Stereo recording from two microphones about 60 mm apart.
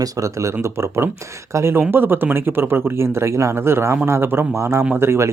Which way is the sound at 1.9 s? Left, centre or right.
Right.